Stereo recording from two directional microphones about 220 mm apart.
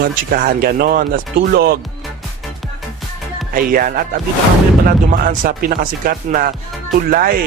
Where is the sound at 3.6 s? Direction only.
40° right (ahead or behind).